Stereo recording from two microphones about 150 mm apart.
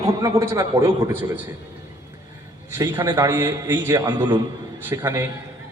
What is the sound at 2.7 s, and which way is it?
A man's voice, 20° right (ahead or behind).